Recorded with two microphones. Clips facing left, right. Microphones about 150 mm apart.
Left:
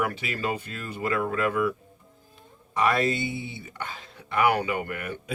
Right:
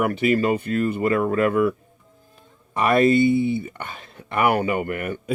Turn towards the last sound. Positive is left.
turn(degrees=-55)  # may be behind; listen again after turning